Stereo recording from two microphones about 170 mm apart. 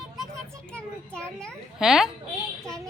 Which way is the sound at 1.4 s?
Centre (ahead or behind).